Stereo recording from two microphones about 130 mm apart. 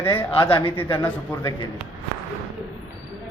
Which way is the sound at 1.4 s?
25° left (ahead or behind).